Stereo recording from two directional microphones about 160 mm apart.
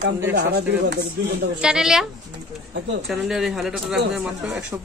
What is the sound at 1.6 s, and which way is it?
Speech, 5° right (ahead or behind).